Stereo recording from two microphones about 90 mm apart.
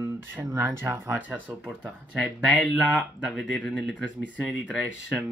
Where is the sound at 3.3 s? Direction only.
Centre (ahead or behind).